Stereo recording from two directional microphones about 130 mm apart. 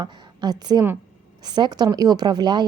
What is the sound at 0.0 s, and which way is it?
A woman's voice, 30° right (ahead or behind).